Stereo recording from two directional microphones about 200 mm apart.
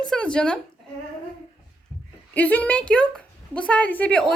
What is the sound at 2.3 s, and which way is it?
A woman's voice, 10° left (ahead or behind).